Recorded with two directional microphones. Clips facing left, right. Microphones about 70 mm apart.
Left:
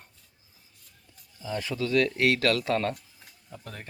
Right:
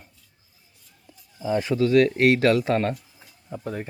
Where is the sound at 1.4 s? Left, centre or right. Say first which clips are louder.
Right 9 dB; right.